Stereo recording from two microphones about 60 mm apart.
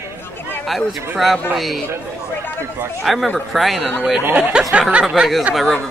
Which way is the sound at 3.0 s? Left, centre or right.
Centre.